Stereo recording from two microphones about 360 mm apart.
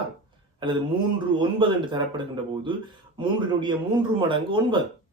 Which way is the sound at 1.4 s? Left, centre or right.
Centre.